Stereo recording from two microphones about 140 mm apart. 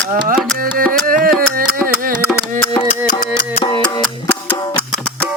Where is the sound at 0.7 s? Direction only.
90° right.